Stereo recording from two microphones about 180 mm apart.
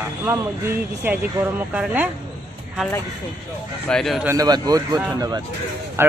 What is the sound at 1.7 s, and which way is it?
Speech, 10° right (ahead or behind).